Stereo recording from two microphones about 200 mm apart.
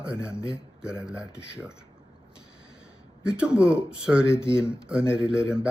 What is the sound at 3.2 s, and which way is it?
Speech, 5° right (ahead or behind).